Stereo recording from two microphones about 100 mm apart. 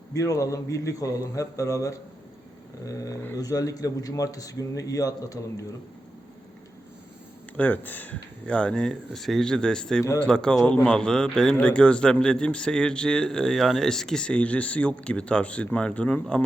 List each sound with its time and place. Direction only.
0.1 s speech: 35° left (ahead or behind)
7.5 s speech: 15° left (ahead or behind)